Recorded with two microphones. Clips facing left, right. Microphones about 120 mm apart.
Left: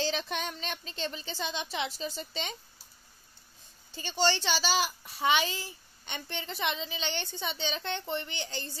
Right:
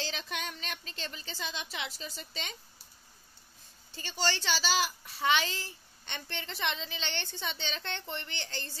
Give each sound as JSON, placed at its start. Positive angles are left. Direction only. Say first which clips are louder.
{"t": 0.3, "sound": "a woman's voice", "louder": "left 4 dB", "side_deg": 30}
{"t": 3.9, "sound": "a child's voice", "louder": "left 5 dB", "side_deg": 20}